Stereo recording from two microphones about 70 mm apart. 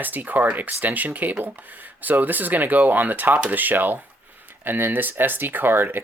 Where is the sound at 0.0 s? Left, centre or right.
Right.